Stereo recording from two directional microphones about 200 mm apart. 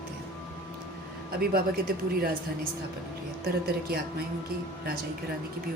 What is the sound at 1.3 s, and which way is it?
Speech, 50° right (ahead or behind).